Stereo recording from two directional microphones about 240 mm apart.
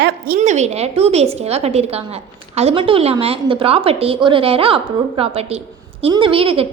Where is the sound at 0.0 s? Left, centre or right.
Right.